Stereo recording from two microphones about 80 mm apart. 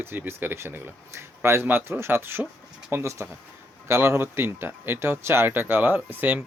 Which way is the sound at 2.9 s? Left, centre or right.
Right.